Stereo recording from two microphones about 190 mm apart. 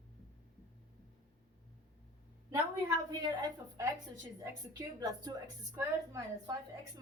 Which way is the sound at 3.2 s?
20° right (ahead or behind).